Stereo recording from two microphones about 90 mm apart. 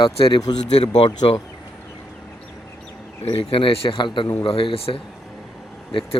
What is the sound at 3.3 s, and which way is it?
Speech, 90° left.